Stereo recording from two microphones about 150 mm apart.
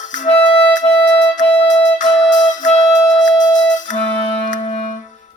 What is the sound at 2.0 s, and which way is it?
Music, 55° left (ahead or behind).